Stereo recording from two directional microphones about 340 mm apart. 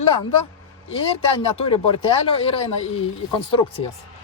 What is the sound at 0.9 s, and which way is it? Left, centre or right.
Speech, centre.